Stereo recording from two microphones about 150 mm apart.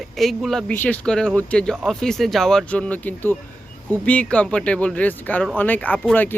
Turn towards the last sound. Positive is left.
turn(degrees=10)  # may be behind; listen again after turning